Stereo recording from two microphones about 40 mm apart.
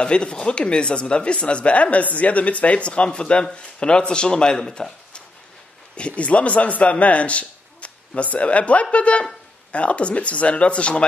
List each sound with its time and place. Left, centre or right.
0.0 s a woman's voice: left
5.9 s speech: left